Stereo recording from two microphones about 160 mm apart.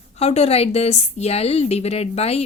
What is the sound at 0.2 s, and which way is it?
A woman's voice, 40° left (ahead or behind).